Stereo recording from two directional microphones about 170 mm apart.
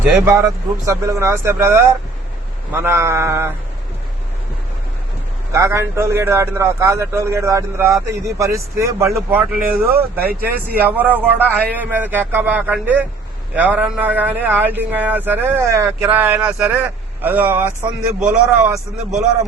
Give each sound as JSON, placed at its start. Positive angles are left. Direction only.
{"t": 0.3, "sound": "a man's voice", "side_deg": -20}
{"t": 5.5, "sound": "a man's voice", "side_deg": -15}
{"t": 9.1, "sound": "a man's voice", "side_deg": 0}